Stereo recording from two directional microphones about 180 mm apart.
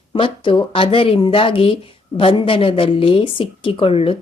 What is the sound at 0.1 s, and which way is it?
Speech, 30° left (ahead or behind).